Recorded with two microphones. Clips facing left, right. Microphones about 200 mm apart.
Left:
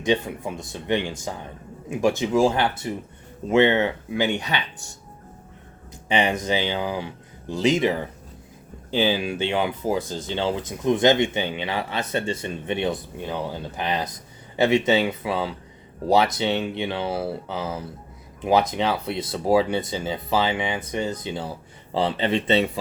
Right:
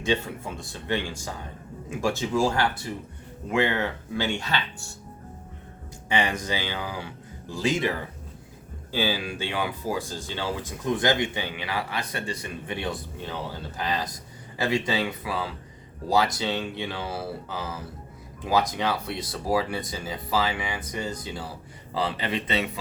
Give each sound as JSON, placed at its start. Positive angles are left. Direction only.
{"t": 0.0, "sound": "speech", "side_deg": 15}
{"t": 6.1, "sound": "speech", "side_deg": 20}